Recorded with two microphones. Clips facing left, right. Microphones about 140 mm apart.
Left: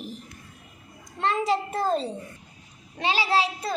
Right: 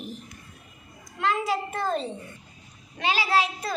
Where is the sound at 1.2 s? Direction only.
35° left (ahead or behind).